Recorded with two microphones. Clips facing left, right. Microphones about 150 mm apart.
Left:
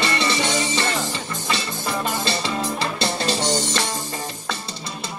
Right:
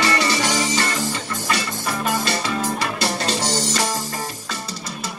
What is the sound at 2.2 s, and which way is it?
Music, 25° left (ahead or behind).